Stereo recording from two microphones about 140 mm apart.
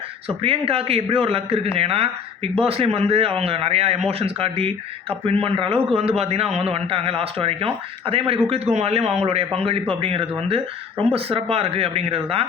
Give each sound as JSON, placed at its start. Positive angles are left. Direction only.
{"t": 0.3, "sound": "speech", "side_deg": -40}